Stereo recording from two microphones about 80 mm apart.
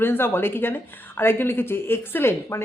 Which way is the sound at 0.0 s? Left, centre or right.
Left.